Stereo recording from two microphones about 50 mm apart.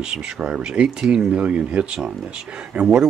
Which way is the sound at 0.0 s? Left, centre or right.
Centre.